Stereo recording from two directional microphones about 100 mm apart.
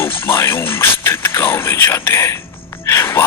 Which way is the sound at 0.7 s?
25° left (ahead or behind).